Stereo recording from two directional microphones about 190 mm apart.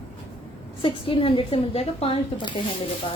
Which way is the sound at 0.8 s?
25° left (ahead or behind).